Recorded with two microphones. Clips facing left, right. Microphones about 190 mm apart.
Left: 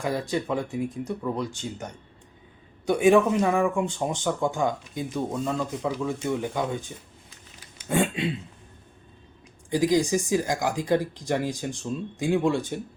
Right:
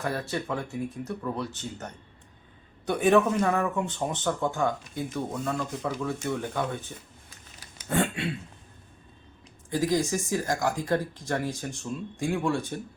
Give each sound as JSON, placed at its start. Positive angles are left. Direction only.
{"t": 0.0, "sound": "speech", "side_deg": 15}
{"t": 7.9, "sound": "a sound", "side_deg": 10}
{"t": 9.6, "sound": "speech", "side_deg": 15}